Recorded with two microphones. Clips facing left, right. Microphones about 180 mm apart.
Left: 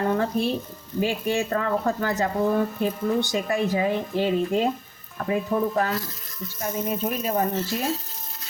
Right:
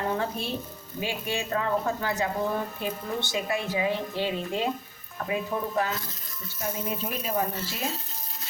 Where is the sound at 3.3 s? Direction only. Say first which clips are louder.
Left 5 dB; 50° left (ahead or behind).